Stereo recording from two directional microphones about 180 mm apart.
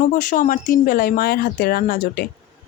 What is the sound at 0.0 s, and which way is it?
Speech, 45° left (ahead or behind).